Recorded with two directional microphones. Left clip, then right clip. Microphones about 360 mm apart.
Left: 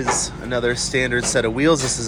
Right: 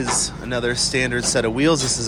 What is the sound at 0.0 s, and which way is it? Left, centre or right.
Speech, centre.